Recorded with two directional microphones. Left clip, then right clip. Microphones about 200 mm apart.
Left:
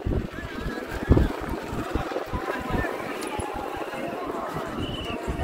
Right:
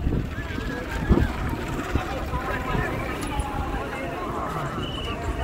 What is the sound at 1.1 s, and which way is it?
Boat, 50° left (ahead or behind).